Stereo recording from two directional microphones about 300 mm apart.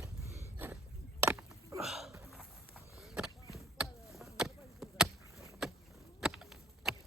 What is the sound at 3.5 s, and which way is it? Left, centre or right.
Chop, centre.